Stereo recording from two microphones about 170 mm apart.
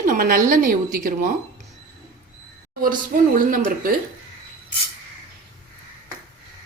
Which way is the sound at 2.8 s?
55° right (ahead or behind).